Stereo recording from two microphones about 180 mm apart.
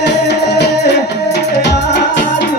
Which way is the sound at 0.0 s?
70° left (ahead or behind).